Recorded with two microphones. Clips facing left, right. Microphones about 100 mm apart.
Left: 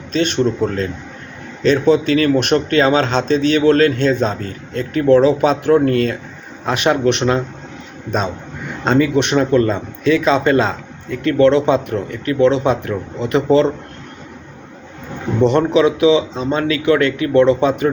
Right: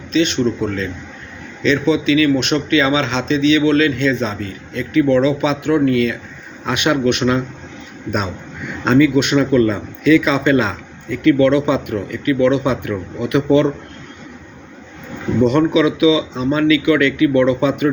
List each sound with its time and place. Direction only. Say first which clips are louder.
0.1 s a man's voice: even; 45° left (ahead or behind)
8.8 s speech: right 2 dB; 35° left (ahead or behind)
15.4 s speech: even; 30° left (ahead or behind)